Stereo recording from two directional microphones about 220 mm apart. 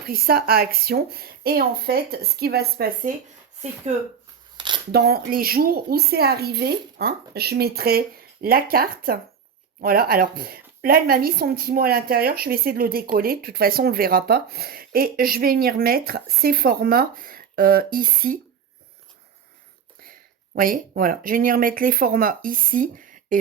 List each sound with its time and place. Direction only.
0.0 s speech: 45° right (ahead or behind)
4.5 s a sound: 20° right (ahead or behind)
4.9 s speech: 45° right (ahead or behind)
20.6 s speech: 40° right (ahead or behind)